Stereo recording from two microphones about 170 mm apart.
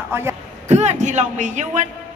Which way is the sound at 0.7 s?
40° right (ahead or behind).